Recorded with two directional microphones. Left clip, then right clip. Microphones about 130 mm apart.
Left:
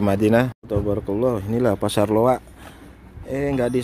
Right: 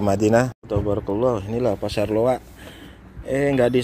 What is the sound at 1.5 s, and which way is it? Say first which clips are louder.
Speech: left 2 dB; 65° left (ahead or behind).